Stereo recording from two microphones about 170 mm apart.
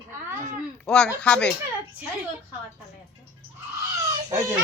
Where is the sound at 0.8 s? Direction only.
5° left (ahead or behind).